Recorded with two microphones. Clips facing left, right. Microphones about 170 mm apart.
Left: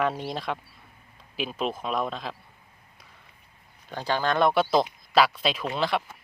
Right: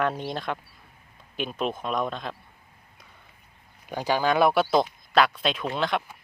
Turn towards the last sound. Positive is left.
turn(degrees=0)  # may be behind; listen again after turning